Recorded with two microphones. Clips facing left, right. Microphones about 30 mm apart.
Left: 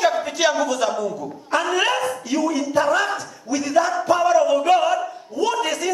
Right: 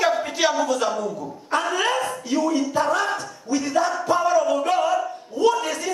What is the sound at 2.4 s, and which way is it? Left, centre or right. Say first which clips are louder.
Speech: right 1 dB; centre.